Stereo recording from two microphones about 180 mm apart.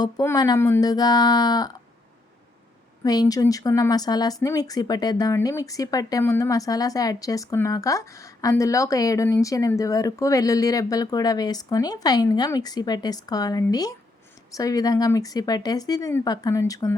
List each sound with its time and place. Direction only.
0.0 s a woman's voice: 20° left (ahead or behind)
3.0 s a woman's voice: 20° left (ahead or behind)